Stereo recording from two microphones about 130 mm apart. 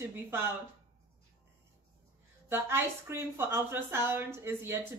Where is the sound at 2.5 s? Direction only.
20° right (ahead or behind).